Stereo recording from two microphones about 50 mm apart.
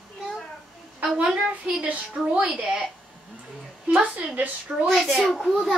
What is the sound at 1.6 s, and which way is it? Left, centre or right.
Speech, right.